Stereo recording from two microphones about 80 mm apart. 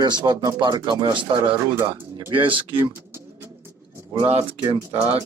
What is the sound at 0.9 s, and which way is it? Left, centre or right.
Speech, right.